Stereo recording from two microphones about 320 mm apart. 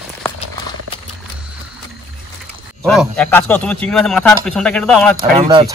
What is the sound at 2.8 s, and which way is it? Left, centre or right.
Speech, centre.